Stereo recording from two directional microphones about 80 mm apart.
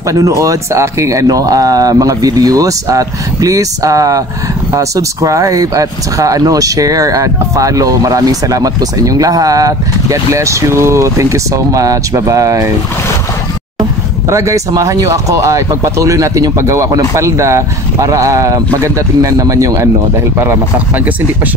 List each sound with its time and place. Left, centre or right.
0.1 s speech: right
14.3 s speech: right